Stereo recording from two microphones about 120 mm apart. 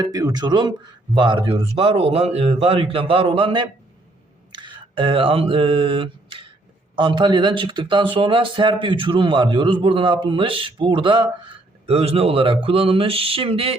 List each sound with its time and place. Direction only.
0.0 s speech: 30° right (ahead or behind); by 3.7 s 45° right (ahead or behind)
4.5 s a sound: 40° right (ahead or behind)
6.9 s speech: 40° right (ahead or behind)
11.9 s speech: 55° right (ahead or behind)